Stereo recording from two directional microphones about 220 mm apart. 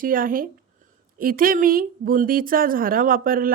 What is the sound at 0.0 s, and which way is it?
A woman's voice, 40° right (ahead or behind).